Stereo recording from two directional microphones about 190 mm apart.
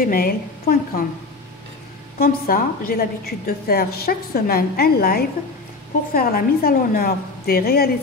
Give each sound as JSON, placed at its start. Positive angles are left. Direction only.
{"t": 0.0, "sound": "a woman's voice", "side_deg": 50}
{"t": 2.1, "sound": "a woman's voice", "side_deg": 50}